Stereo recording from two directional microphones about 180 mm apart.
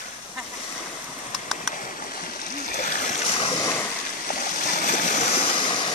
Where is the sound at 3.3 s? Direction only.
30° left (ahead or behind).